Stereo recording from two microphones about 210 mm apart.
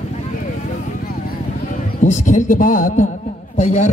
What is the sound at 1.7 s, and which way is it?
A man's voice, 35° left (ahead or behind).